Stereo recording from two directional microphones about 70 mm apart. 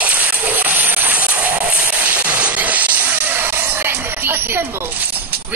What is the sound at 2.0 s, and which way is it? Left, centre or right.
Music, centre.